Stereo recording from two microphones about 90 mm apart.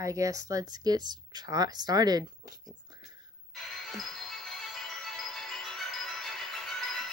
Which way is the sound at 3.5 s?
5° left (ahead or behind).